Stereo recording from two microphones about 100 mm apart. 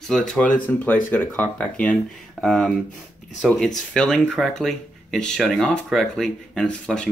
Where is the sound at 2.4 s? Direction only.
5° left (ahead or behind).